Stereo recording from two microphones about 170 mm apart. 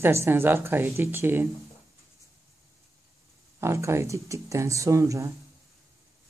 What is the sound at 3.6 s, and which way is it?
Speech, 15° right (ahead or behind).